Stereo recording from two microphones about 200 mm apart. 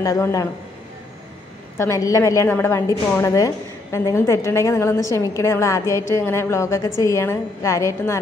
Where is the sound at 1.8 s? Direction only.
15° left (ahead or behind).